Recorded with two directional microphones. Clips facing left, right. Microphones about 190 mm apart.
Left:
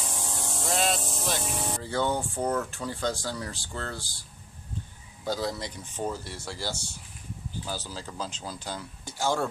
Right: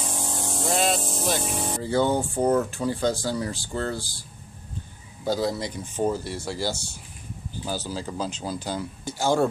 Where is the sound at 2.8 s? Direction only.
5° right (ahead or behind).